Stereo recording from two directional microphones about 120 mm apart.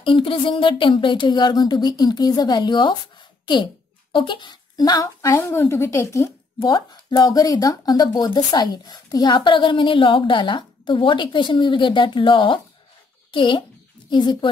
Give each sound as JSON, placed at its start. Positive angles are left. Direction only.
{"t": 0.0, "sound": "speech", "side_deg": 45}
{"t": 5.3, "sound": "a woman's voice", "side_deg": 20}
{"t": 6.7, "sound": "speech", "side_deg": 35}